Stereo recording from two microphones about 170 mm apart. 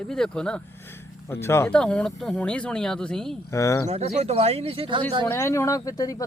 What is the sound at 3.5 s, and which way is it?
Speech, 15° left (ahead or behind).